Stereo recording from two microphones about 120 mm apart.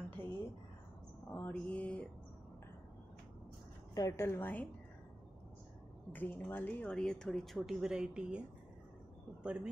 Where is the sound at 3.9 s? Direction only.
25° left (ahead or behind).